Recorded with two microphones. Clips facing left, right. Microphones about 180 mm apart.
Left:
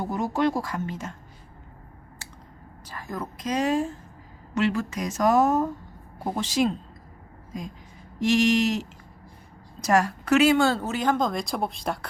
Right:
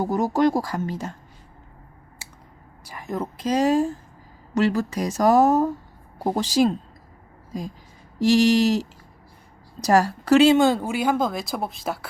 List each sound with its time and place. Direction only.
0.0 s speech: 40° right (ahead or behind)
2.8 s speech: 15° right (ahead or behind); by 6.7 s 35° right (ahead or behind)
8.2 s speech: 35° right (ahead or behind); by 11.9 s centre (ahead or behind)